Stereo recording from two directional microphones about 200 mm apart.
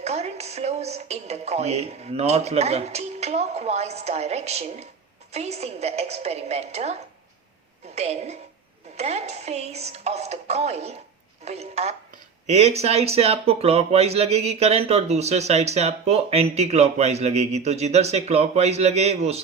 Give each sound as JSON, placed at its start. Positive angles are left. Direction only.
{"t": 0.0, "sound": "speech", "side_deg": -30}
{"t": 7.9, "sound": "speech", "side_deg": -30}